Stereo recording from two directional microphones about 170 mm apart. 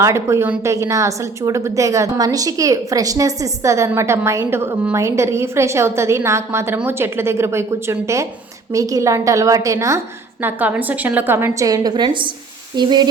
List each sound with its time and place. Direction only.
0.0 s a woman's voice: 15° right (ahead or behind)